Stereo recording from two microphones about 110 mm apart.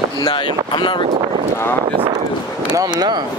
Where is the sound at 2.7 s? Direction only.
35° right (ahead or behind).